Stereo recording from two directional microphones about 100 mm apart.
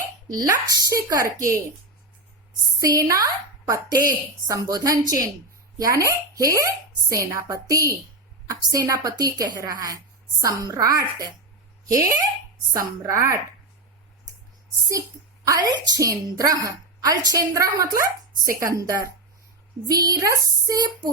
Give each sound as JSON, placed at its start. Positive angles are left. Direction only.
{"t": 0.3, "sound": "a woman's voice", "side_deg": -40}
{"t": 2.8, "sound": "a woman's voice", "side_deg": -35}
{"t": 15.4, "sound": "a woman's voice", "side_deg": -40}